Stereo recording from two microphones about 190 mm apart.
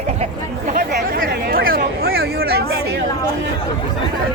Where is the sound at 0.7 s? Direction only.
50° right (ahead or behind).